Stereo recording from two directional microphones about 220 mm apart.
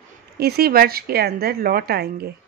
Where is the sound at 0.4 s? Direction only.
45° right (ahead or behind).